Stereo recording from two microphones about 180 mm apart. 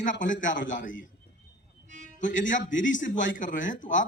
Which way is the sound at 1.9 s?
45° right (ahead or behind).